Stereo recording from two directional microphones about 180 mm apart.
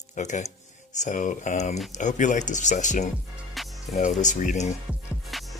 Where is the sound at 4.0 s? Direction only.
40° left (ahead or behind).